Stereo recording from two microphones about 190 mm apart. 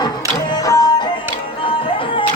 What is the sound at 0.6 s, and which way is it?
Music, 20° left (ahead or behind).